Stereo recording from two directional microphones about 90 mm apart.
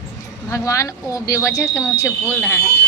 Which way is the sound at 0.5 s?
35° left (ahead or behind).